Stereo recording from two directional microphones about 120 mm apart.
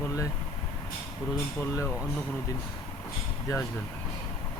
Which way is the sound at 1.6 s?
20° left (ahead or behind).